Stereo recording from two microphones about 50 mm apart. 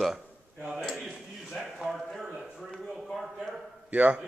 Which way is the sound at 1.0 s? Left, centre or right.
Centre.